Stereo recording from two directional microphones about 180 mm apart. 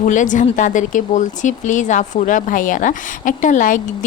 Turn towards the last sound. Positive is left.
turn(degrees=45)  # may be behind; listen again after turning